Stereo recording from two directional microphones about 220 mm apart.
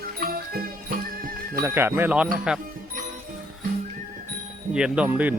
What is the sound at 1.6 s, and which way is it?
Speech, 10° right (ahead or behind).